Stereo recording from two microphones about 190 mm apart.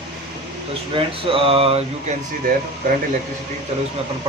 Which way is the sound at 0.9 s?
30° right (ahead or behind).